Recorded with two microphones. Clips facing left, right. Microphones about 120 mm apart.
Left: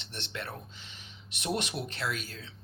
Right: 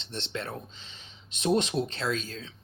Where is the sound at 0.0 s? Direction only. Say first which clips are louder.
Right 5 dB; 20° right (ahead or behind).